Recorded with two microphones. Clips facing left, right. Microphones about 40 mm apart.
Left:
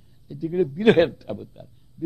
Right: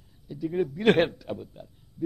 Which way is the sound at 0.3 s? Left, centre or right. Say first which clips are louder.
Left 4 dB; centre.